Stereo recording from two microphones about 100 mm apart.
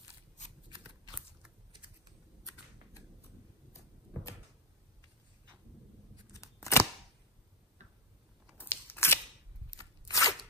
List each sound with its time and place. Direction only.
6.3 s scissors: 30° left (ahead or behind)
8.5 s scissors: 20° left (ahead or behind)
9.8 s crunch: 35° left (ahead or behind)